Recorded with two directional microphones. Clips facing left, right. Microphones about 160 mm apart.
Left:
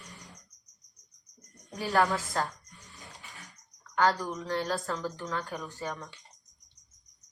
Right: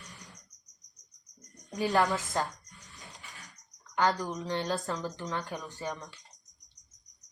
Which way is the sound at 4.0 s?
20° right (ahead or behind).